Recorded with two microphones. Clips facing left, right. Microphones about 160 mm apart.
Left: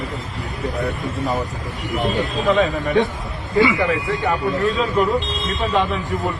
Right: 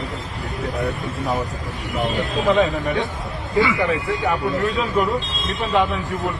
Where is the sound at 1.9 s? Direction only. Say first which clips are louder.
Left 1 dB; centre (ahead or behind).